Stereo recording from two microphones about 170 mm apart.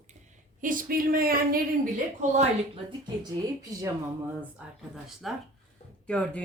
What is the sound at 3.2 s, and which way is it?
Speech, 20° right (ahead or behind).